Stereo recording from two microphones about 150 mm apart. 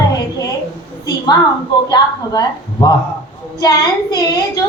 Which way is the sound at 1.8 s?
25° left (ahead or behind).